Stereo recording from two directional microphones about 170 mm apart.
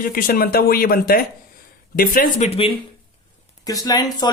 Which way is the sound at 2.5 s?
35° left (ahead or behind).